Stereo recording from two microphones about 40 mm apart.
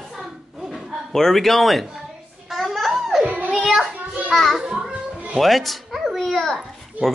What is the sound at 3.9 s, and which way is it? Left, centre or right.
Children playing, right.